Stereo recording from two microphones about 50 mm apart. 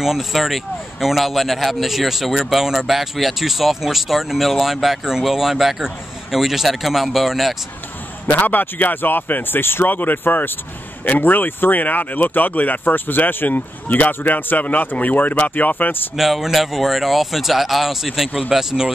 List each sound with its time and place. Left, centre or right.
0.0 s a man's voice: centre
8.3 s speech: left
16.2 s a man's voice: centre